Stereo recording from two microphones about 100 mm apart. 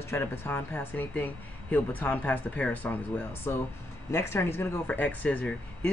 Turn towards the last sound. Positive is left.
turn(degrees=10)  # may be behind; listen again after turning